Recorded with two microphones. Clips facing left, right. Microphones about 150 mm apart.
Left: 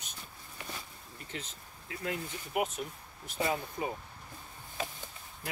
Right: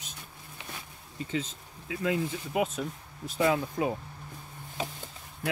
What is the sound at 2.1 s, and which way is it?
Speech, 90° right.